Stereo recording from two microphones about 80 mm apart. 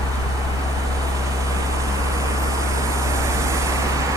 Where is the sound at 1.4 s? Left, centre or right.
Right.